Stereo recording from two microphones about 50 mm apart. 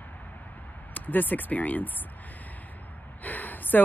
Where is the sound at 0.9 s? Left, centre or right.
Left.